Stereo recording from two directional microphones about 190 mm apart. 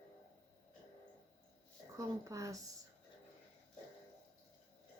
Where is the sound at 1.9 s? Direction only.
15° right (ahead or behind).